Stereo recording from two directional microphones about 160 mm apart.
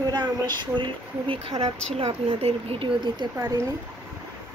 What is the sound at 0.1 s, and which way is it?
Speech, 30° right (ahead or behind).